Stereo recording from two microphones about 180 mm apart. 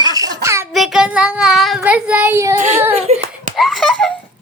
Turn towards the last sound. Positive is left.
turn(degrees=0)  # may be behind; listen again after turning